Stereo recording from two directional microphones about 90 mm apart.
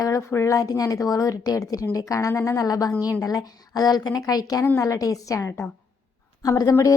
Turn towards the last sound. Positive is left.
turn(degrees=40)  # may be behind; listen again after turning